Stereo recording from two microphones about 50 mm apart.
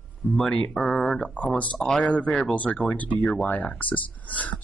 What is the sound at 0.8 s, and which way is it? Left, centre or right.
Speech, centre.